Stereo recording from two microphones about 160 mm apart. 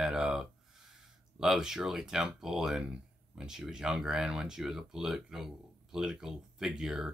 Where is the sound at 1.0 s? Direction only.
5° right (ahead or behind).